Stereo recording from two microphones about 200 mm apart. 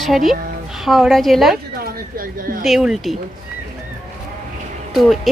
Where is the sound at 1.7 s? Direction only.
45° right (ahead or behind).